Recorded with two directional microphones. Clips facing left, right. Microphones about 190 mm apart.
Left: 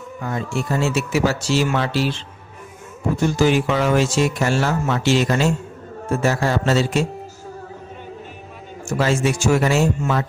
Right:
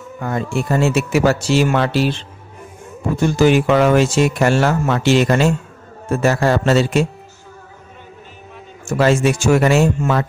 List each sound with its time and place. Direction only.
0.2 s speech: 55° right (ahead or behind)
3.3 s speech: 65° right (ahead or behind)
8.9 s speech: 65° right (ahead or behind)